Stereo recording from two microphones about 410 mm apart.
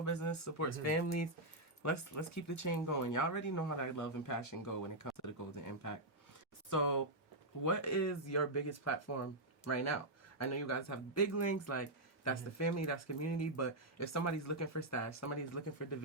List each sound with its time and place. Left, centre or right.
0.0 s speech: left